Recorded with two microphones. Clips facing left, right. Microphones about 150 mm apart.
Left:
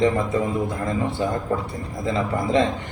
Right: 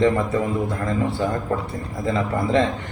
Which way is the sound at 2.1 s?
15° left (ahead or behind).